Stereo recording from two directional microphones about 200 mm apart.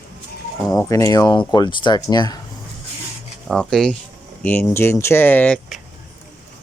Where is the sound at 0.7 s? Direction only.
15° left (ahead or behind).